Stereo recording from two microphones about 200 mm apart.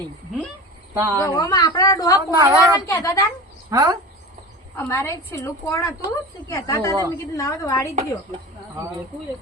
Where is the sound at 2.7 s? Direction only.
15° left (ahead or behind).